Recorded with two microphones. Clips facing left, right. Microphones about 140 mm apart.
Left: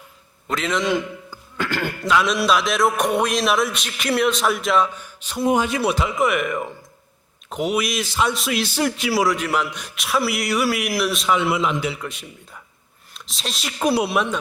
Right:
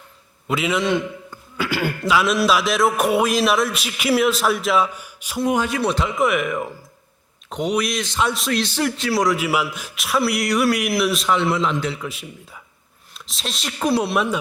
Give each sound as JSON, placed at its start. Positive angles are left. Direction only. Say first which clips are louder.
{"t": 0.4, "sound": "a man's voice", "louder": "right 1 dB", "side_deg": -5}
{"t": 5.5, "sound": "a man's voice", "louder": "left 1 dB", "side_deg": 20}
{"t": 5.8, "sound": "a man's voice", "louder": "even", "side_deg": 5}
{"t": 11.9, "sound": "a man's voice", "louder": "right 2 dB", "side_deg": 0}